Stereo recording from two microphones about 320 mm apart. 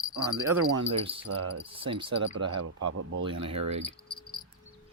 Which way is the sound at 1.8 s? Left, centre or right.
Centre.